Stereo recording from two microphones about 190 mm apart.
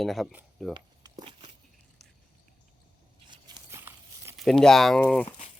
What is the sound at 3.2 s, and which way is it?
Tearing, 20° right (ahead or behind).